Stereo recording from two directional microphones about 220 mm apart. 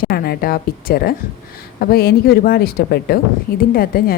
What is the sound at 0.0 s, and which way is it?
A woman's voice, 45° left (ahead or behind).